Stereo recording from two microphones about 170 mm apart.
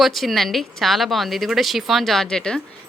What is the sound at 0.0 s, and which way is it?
Speech, centre (ahead or behind).